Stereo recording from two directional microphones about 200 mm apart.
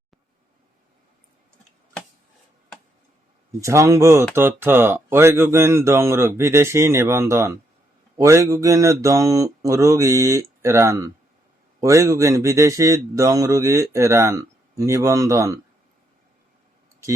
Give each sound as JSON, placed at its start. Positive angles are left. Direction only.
{"t": 3.6, "sound": "speech", "side_deg": -15}